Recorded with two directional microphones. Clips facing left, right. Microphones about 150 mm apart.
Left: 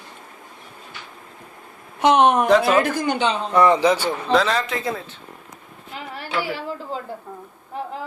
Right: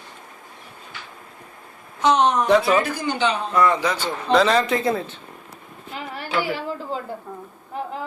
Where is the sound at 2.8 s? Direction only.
50° left (ahead or behind).